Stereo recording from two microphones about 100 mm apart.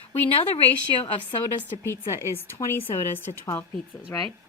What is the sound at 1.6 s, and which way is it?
A woman's voice, 25° left (ahead or behind).